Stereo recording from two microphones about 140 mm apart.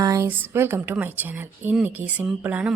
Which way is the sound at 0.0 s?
20° right (ahead or behind).